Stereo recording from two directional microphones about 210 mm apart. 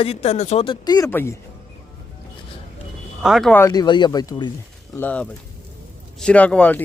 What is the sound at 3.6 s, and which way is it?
Speech, 20° left (ahead or behind).